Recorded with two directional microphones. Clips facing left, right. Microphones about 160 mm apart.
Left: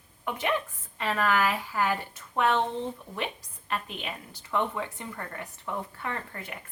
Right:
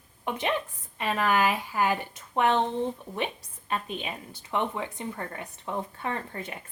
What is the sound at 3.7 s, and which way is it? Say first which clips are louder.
Speech: right 2 dB; 20° right (ahead or behind).